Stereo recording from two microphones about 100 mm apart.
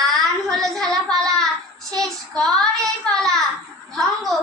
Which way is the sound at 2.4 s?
5° left (ahead or behind).